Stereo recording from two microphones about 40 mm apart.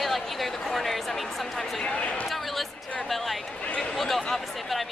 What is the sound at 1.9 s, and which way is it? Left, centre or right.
Speech, left.